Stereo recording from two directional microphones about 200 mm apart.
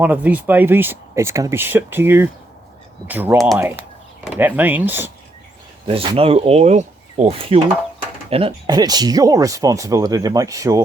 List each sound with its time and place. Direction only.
0.0 s speech: 10° right (ahead or behind)
5.9 s speech: 30° right (ahead or behind)